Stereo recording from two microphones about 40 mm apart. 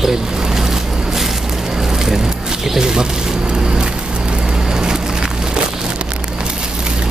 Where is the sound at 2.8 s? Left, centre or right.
Centre.